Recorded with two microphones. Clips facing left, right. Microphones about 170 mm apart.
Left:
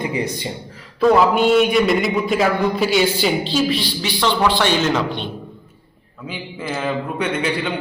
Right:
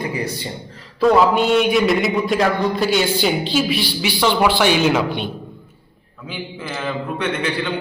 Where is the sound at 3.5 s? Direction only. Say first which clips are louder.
Even; 5° right (ahead or behind).